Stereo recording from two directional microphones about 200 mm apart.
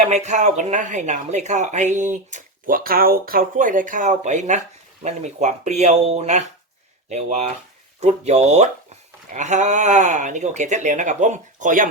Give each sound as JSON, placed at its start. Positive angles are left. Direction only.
{"t": 0.1, "sound": "speech", "side_deg": -35}